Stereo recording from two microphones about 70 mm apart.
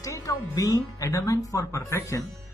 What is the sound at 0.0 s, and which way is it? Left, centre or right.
Speech, left.